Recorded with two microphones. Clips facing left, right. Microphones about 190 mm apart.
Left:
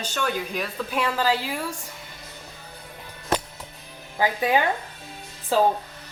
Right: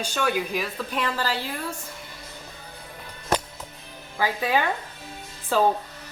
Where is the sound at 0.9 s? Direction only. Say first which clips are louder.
Left 4 dB; 10° left (ahead or behind).